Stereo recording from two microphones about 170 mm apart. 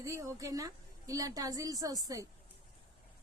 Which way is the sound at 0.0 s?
20° right (ahead or behind).